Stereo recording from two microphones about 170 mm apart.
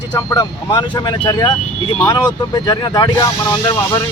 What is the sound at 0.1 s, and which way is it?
Speech, 25° left (ahead or behind).